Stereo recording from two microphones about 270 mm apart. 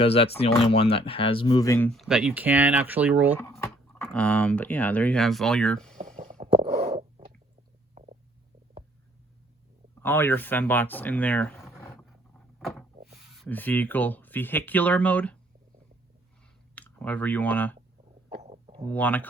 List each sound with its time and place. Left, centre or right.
0.0 s speech: left; by 3.3 s centre
3.4 s speech: centre
6.0 s a sound: right
10.0 s speech: centre
13.3 s speech: centre
16.7 s speech: centre
18.3 s a sound: right
18.9 s speech: centre